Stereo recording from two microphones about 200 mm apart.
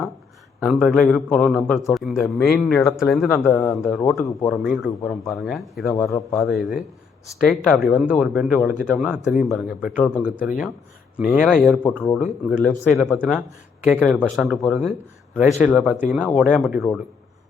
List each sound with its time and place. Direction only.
0.6 s speech: centre (ahead or behind)
5.9 s speech: 15° left (ahead or behind)
6.5 s speech: centre (ahead or behind)